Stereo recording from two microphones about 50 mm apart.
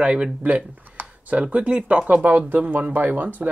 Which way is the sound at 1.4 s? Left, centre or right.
Right.